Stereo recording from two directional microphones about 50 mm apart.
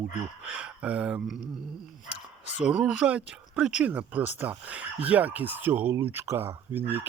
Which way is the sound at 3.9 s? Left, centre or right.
Right.